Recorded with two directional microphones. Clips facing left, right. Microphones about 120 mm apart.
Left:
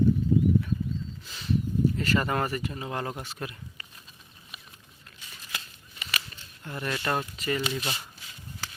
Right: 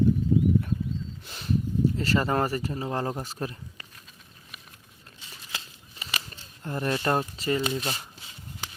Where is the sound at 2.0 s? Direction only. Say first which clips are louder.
Right 2 dB; 30° right (ahead or behind).